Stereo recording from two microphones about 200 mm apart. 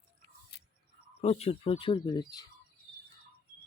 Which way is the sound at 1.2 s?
30° left (ahead or behind).